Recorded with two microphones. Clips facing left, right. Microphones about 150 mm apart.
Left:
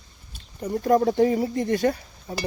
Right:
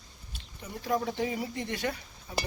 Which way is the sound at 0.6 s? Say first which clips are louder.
Left 11 dB; 45° left (ahead or behind).